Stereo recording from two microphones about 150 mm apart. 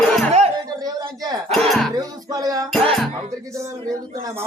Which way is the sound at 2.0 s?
25° right (ahead or behind).